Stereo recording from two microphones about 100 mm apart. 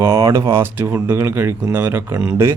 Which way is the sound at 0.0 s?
35° right (ahead or behind).